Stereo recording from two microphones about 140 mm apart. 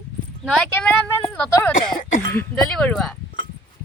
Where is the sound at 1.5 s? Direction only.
20° left (ahead or behind).